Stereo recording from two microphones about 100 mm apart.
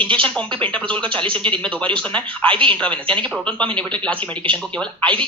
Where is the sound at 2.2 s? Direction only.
60° right (ahead or behind).